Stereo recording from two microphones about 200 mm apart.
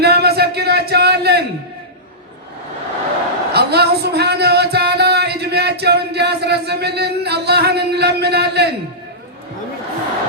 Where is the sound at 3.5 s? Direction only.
55° right (ahead or behind).